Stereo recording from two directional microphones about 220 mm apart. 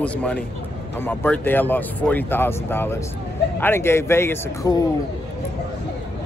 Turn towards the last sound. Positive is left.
turn(degrees=10)  # may be behind; listen again after turning